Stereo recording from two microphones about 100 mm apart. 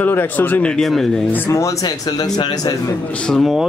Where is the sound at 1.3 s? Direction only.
30° left (ahead or behind).